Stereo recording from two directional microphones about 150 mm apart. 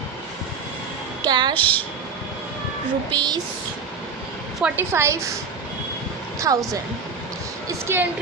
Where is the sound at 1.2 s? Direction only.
30° right (ahead or behind).